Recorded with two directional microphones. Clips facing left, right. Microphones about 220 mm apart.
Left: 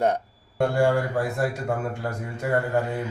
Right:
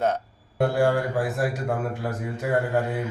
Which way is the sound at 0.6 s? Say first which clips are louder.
Even; centre (ahead or behind).